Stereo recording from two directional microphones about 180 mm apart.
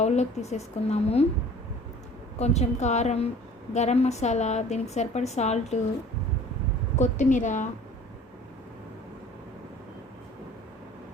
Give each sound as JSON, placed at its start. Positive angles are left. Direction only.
{"t": 0.0, "sound": "a woman's voice", "side_deg": 40}
{"t": 2.4, "sound": "a woman's voice", "side_deg": 40}
{"t": 7.0, "sound": "a woman's voice", "side_deg": 45}